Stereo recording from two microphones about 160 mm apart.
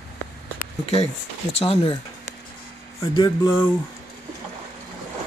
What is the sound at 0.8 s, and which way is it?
Speech, 35° left (ahead or behind).